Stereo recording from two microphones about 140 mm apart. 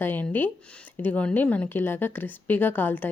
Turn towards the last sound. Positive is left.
turn(degrees=15)  # may be behind; listen again after turning